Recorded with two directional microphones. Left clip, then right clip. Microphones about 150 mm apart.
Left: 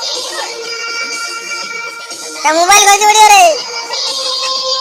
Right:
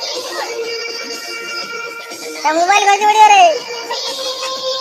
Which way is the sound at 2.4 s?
10° left (ahead or behind).